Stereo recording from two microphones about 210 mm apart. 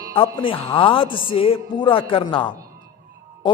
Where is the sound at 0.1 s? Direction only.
25° left (ahead or behind).